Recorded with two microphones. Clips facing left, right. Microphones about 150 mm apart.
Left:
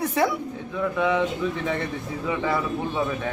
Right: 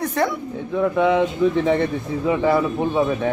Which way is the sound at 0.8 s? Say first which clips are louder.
Right 5 dB; 30° right (ahead or behind).